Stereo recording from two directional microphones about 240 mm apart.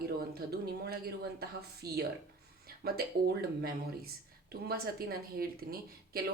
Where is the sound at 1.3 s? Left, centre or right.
Right.